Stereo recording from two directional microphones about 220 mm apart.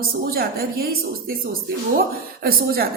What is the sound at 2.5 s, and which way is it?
Speech, 45° right (ahead or behind).